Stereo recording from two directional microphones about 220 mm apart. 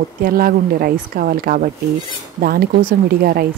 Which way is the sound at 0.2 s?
40° right (ahead or behind).